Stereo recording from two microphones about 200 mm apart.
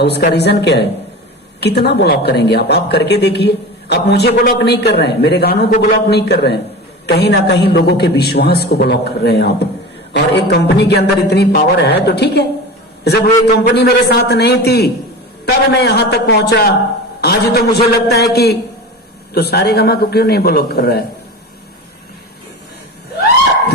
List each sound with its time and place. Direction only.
0.0 s a woman's voice: 55° left (ahead or behind)
13.7 s a woman's voice: 55° left (ahead or behind)